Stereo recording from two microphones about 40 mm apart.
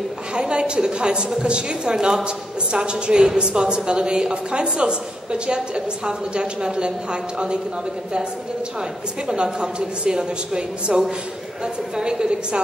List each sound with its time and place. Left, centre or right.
0.3 s a woman's voice: right
9.3 s a woman's voice: right